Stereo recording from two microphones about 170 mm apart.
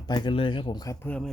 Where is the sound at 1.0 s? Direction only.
10° left (ahead or behind).